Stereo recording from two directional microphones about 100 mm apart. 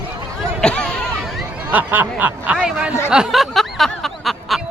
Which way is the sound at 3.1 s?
5° right (ahead or behind).